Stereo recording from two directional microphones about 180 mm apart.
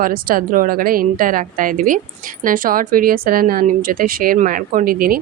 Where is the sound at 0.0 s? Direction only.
50° right (ahead or behind).